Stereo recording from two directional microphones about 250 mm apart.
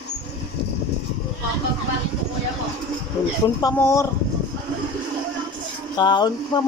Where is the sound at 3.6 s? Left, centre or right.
Centre.